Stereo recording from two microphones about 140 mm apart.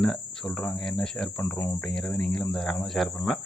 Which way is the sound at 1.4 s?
15° left (ahead or behind).